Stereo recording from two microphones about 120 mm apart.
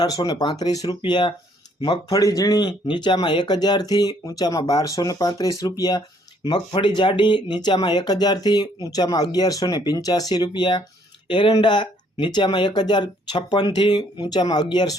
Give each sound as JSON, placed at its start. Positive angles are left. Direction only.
{"t": 0.0, "sound": "speech", "side_deg": 35}